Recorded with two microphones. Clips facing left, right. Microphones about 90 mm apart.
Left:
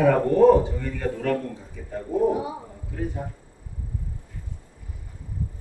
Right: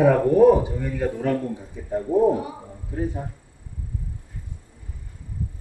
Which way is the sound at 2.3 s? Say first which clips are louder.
Even; 20° left (ahead or behind).